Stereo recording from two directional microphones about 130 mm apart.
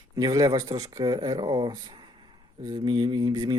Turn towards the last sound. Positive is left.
turn(degrees=-35)  # may be behind; listen again after turning